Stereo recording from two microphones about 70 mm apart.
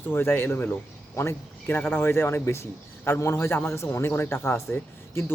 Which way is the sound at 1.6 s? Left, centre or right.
Left.